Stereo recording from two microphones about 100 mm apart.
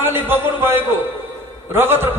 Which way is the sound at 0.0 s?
20° right (ahead or behind).